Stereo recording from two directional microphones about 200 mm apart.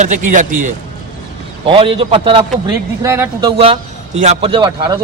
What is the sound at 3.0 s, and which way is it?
Speech, 15° right (ahead or behind).